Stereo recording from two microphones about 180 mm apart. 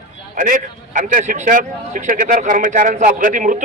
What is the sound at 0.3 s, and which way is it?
A man's voice, 50° right (ahead or behind).